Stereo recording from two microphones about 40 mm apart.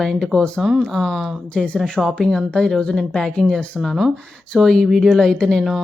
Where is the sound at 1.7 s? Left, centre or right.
Centre.